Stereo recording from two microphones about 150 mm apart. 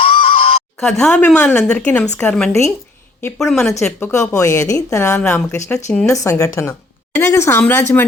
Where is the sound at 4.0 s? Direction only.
20° left (ahead or behind).